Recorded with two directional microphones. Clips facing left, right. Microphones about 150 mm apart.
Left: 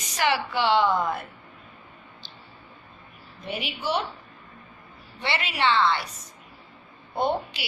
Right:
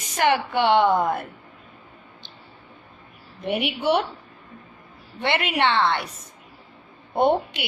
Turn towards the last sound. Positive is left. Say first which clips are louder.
# right 6 dB
turn(degrees=-55)  # may be behind; listen again after turning